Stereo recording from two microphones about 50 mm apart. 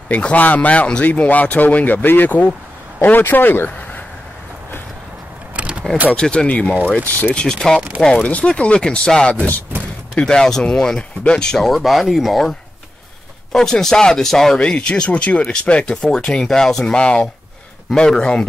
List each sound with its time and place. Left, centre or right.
0.1 s speech: left
5.6 s keys jangling: right
6.1 s speech: centre
6.4 s speech: left
7.6 s speech: centre
8.2 s speech: left; by 14.6 s centre
14.6 s speech: left